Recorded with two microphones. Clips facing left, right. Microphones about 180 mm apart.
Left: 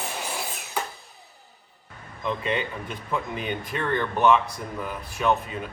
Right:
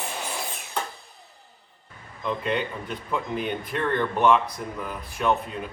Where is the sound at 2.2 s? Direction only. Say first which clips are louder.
Right 1 dB; centre (ahead or behind).